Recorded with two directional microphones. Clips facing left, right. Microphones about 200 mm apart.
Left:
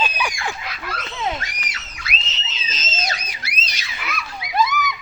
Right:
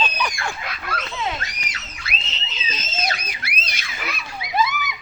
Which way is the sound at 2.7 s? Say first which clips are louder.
Right 1 dB; 60° right (ahead or behind).